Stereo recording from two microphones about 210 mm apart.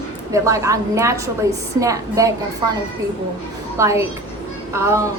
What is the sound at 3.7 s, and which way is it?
A woman's voice, 15° right (ahead or behind).